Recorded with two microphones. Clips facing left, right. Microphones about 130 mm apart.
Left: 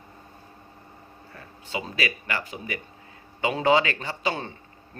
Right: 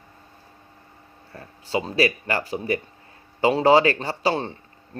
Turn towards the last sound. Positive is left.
turn(degrees=-35)  # may be behind; listen again after turning